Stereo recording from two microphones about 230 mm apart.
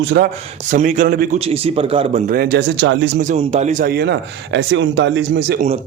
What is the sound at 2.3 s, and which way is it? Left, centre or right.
Speech, right.